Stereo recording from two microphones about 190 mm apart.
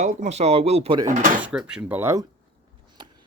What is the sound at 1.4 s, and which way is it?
Speech, 5° right (ahead or behind).